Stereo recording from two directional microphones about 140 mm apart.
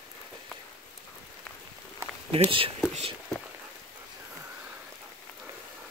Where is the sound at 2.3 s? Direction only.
40° right (ahead or behind).